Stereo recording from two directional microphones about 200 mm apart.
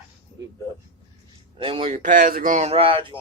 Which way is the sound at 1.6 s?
25° right (ahead or behind).